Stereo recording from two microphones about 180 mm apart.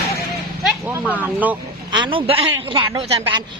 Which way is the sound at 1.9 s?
25° right (ahead or behind).